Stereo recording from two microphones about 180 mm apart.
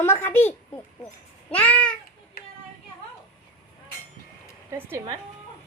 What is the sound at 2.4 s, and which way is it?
Child singing, 55° left (ahead or behind).